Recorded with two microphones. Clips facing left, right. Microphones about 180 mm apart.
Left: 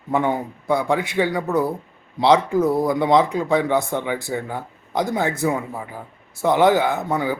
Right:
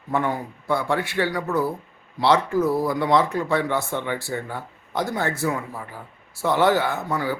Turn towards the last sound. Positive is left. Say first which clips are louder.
# left 3 dB
turn(degrees=20)  # may be behind; listen again after turning